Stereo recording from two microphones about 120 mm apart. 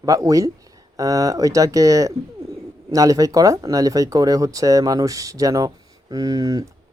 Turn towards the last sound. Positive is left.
turn(degrees=-30)  # may be behind; listen again after turning